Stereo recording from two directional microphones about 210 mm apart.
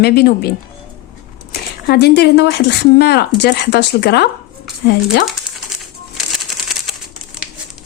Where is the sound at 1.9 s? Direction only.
50° left (ahead or behind).